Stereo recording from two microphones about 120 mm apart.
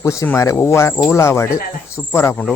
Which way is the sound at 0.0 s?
25° left (ahead or behind).